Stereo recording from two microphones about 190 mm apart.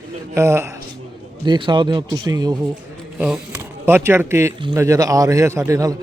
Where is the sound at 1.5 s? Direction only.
25° right (ahead or behind).